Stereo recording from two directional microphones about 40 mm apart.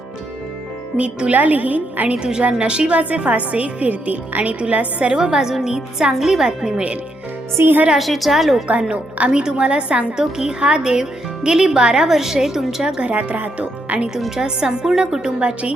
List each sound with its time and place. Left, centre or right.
0.9 s a woman's voice: right
2.1 s a woman's voice: right
4.7 s a woman's voice: right
5.1 s a woman's voice: centre
7.5 s speech: right
7.9 s a woman's voice: centre
8.9 s a woman's voice: right
9.3 s speech: right
10.2 s speech: centre
12.0 s a woman's voice: centre
13.0 s a woman's voice: right
14.3 s speech: centre